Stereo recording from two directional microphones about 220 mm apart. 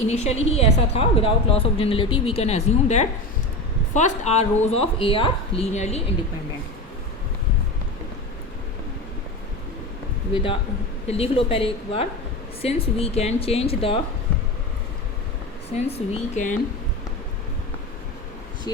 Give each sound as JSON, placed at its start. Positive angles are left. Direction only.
{"t": 0.1, "sound": "a woman's voice", "side_deg": 30}
{"t": 11.0, "sound": "a woman's voice", "side_deg": 25}
{"t": 15.7, "sound": "speech", "side_deg": 30}